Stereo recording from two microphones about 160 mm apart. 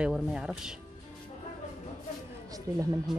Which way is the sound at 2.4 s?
20° right (ahead or behind).